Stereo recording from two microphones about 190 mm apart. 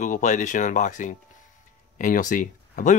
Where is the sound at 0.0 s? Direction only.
40° left (ahead or behind).